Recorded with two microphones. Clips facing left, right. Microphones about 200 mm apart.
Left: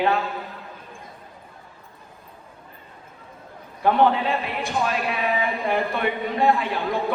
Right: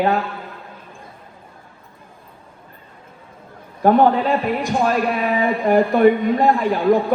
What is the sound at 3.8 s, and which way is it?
Speech, 45° right (ahead or behind).